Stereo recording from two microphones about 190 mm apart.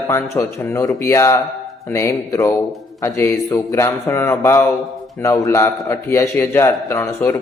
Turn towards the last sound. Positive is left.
turn(degrees=15)  # may be behind; listen again after turning